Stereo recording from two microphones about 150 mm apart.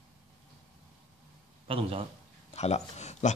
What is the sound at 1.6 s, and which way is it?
Speech, 40° right (ahead or behind).